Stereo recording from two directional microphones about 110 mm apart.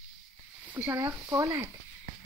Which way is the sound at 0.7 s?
15° right (ahead or behind).